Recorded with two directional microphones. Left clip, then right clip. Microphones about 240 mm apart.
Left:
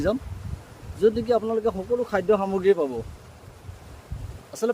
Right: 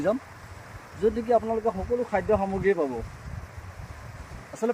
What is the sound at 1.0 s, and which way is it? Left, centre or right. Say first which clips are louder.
Speech: left 2 dB; centre.